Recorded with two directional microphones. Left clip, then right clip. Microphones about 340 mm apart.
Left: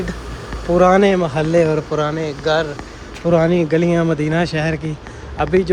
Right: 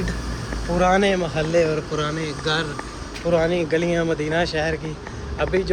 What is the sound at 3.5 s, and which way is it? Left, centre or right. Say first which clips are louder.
Speech: left 5 dB; centre.